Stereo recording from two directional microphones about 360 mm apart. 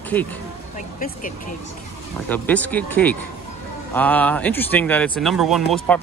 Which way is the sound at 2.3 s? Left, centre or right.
Centre.